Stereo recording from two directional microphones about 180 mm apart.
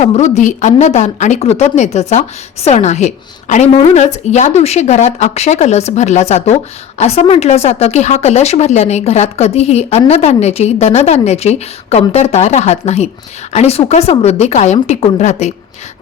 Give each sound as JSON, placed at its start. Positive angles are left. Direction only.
{"t": 0.0, "sound": "a woman's voice", "side_deg": 40}